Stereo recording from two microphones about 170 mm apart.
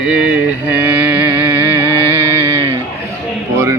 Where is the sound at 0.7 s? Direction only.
10° right (ahead or behind).